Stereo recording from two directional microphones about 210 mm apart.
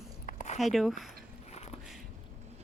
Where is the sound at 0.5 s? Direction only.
Centre (ahead or behind).